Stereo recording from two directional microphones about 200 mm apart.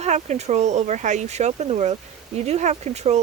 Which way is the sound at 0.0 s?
35° right (ahead or behind).